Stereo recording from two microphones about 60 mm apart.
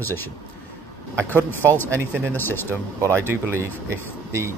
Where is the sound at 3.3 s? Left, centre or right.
Right.